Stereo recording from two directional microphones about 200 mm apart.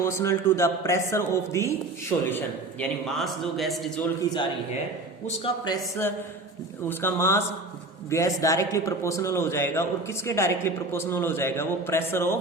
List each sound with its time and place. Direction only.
0.0 s a man's voice: 15° left (ahead or behind)
5.2 s a man's voice: 25° left (ahead or behind)